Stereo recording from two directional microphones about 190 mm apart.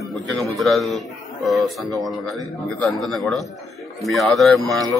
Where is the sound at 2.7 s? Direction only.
Centre (ahead or behind).